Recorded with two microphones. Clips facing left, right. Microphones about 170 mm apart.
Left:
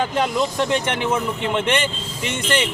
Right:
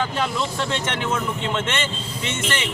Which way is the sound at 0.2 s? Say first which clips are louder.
Left 4 dB; 15° left (ahead or behind).